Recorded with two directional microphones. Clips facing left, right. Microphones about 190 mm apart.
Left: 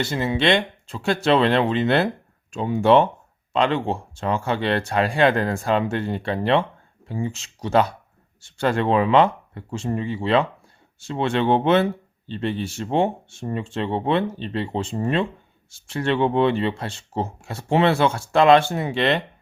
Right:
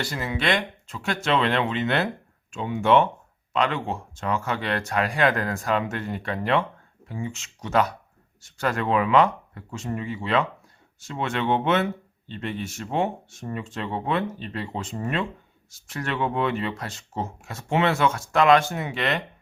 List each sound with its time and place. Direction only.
0.0 s speech: 25° left (ahead or behind)